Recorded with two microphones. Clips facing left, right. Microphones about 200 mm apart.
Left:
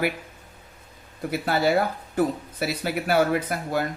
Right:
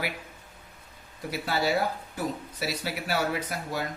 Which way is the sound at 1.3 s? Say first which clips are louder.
Left 5 dB; 55° left (ahead or behind).